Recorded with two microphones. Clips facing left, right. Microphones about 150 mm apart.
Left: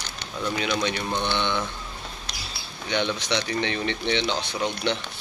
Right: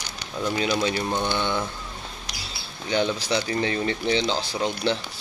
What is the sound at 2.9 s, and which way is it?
Speech, 40° right (ahead or behind).